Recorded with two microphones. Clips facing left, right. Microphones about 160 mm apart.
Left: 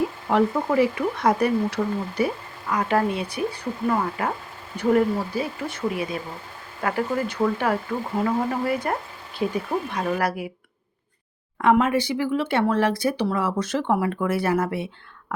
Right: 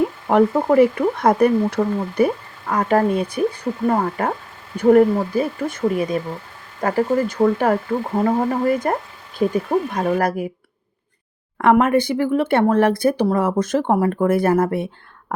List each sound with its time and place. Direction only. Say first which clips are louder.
0.3 s speech: right 6 dB; 50° right (ahead or behind)
11.5 s speech: right 4 dB; 55° right (ahead or behind)